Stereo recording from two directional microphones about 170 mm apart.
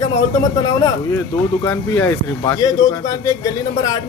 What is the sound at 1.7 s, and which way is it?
A man's voice, 10° left (ahead or behind).